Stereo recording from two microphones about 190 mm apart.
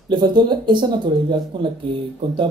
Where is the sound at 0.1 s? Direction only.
25° right (ahead or behind).